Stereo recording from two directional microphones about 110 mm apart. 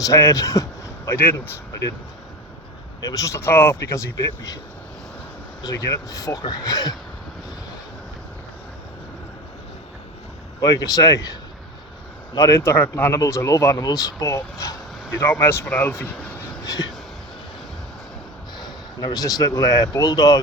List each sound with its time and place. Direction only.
0.0 s speech: 30° left (ahead or behind)
3.0 s speech: 30° left (ahead or behind)
5.6 s speech: 30° left (ahead or behind)
10.6 s speech: 35° left (ahead or behind)
12.5 s speech: 20° left (ahead or behind)
18.6 s speech: 40° left (ahead or behind)